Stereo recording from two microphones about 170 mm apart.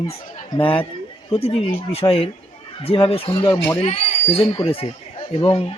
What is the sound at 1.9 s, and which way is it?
Speech, 35° left (ahead or behind).